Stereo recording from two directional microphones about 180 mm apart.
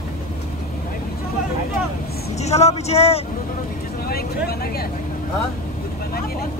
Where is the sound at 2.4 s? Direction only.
35° left (ahead or behind).